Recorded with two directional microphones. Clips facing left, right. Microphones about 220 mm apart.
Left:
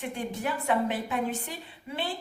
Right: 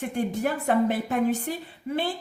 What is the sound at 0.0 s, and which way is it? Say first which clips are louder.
A woman's voice: right 6 dB; 45° right (ahead or behind).